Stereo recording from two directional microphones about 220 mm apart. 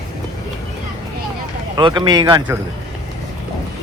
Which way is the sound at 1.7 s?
20° right (ahead or behind).